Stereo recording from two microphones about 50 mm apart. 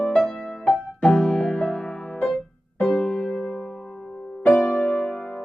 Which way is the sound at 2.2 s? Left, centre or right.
Centre.